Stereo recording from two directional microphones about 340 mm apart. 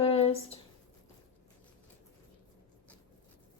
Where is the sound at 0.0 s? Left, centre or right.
Centre.